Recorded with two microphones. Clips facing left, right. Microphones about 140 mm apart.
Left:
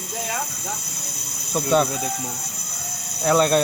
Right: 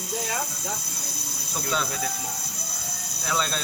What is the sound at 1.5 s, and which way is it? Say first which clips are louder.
Speech: left 10 dB; 55° left (ahead or behind).